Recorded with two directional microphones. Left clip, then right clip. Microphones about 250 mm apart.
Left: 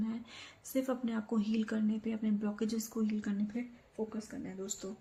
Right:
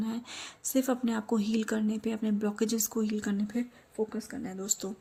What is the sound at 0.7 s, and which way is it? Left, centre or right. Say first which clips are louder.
Speech: right 6 dB; right.